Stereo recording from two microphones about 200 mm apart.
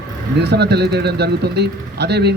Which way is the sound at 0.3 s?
55° right (ahead or behind).